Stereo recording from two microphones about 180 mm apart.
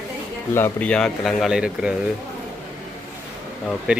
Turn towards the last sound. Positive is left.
turn(degrees=-5)  # may be behind; listen again after turning